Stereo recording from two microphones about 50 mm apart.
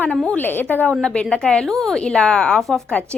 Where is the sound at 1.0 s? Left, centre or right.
Centre.